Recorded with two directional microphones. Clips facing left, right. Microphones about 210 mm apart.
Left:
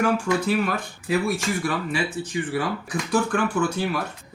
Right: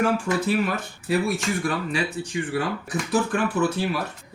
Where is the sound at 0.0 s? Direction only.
Centre (ahead or behind).